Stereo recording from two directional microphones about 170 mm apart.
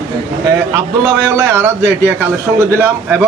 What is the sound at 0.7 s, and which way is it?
A man's voice, 15° right (ahead or behind).